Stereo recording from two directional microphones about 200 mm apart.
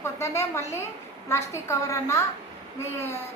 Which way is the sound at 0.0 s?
15° left (ahead or behind).